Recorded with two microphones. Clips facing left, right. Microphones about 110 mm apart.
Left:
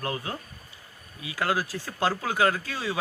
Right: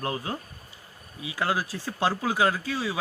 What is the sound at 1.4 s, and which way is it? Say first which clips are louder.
Speech: even; 20° right (ahead or behind).